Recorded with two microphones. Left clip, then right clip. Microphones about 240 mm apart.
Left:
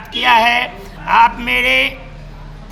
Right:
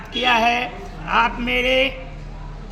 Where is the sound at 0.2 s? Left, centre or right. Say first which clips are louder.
Left 6 dB; left.